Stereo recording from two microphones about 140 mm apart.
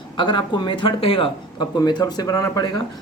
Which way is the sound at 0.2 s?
35° left (ahead or behind).